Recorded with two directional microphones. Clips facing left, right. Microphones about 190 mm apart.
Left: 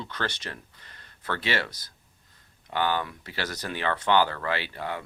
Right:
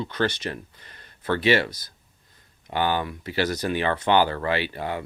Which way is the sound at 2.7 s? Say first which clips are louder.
Right 3 dB; 15° right (ahead or behind).